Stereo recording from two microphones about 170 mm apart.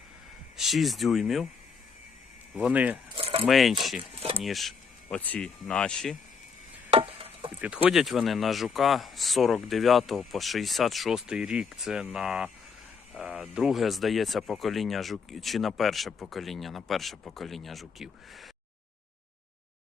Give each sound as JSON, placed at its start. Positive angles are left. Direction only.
{"t": 0.5, "sound": "speech", "side_deg": 0}
{"t": 2.6, "sound": "speech", "side_deg": -5}
{"t": 3.2, "sound": "keys jangling", "side_deg": -35}
{"t": 3.4, "sound": "speech", "side_deg": 0}
{"t": 4.1, "sound": "a sound", "side_deg": -35}
{"t": 4.4, "sound": "speech", "side_deg": 0}
{"t": 6.9, "sound": "a sound", "side_deg": -35}
{"t": 7.6, "sound": "speech", "side_deg": -5}